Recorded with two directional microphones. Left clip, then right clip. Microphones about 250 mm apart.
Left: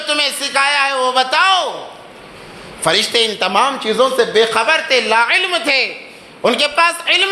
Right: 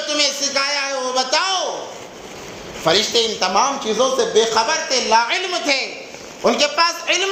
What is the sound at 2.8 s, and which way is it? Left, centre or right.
A man's voice, left.